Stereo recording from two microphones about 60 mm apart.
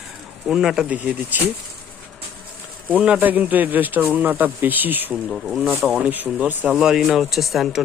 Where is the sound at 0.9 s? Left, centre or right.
Right.